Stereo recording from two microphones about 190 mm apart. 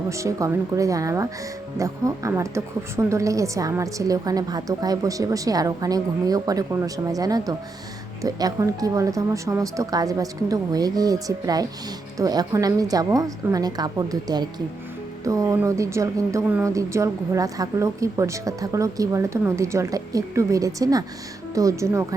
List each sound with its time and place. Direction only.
0.1 s a woman's voice: 15° right (ahead or behind)